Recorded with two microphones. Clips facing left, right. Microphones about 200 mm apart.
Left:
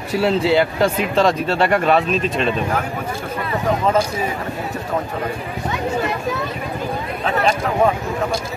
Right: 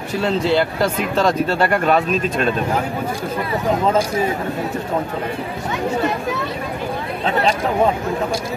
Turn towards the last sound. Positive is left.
turn(degrees=-30)  # may be behind; listen again after turning